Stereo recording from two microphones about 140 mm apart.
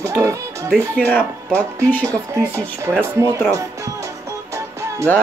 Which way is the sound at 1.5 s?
10° left (ahead or behind).